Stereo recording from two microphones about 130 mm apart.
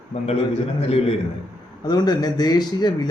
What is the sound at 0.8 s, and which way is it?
Speech, 50° left (ahead or behind).